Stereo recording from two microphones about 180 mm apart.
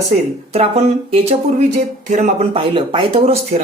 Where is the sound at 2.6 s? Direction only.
30° right (ahead or behind).